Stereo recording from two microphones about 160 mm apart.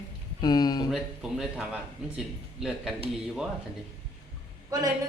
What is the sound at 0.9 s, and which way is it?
Speech, 5° right (ahead or behind).